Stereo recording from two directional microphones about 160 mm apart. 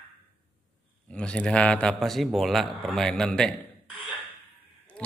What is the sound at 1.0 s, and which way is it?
A man's voice, 5° left (ahead or behind).